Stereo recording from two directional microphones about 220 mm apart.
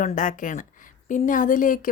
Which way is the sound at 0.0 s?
35° left (ahead or behind).